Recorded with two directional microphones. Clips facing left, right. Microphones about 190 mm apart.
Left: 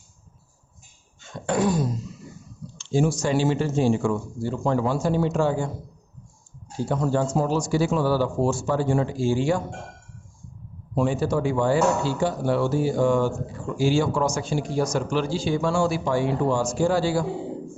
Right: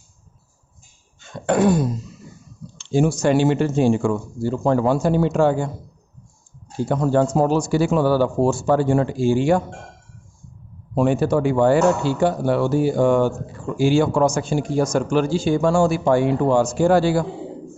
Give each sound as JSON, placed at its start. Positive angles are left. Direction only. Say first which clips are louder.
{"t": 1.2, "sound": "cough", "louder": "right 5 dB", "side_deg": -60}
{"t": 2.7, "sound": "speech", "louder": "right 3 dB", "side_deg": -60}
{"t": 4.4, "sound": "speech", "louder": "right 5 dB", "side_deg": -40}
{"t": 4.8, "sound": "speech", "louder": "right 5 dB", "side_deg": -60}
{"t": 6.8, "sound": "speech", "louder": "right 5 dB", "side_deg": -60}
{"t": 10.9, "sound": "a man's voice", "louder": "right 5 dB", "side_deg": -60}